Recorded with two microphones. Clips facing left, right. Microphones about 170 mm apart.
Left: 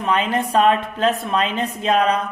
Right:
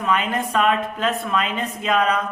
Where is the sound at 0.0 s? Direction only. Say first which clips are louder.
Left 2 dB; 30° left (ahead or behind).